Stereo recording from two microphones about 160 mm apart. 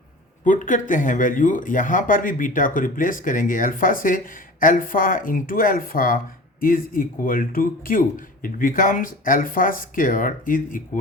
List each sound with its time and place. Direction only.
0.4 s speech: 55° left (ahead or behind)